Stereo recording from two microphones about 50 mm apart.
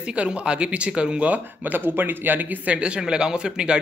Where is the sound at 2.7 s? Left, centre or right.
Right.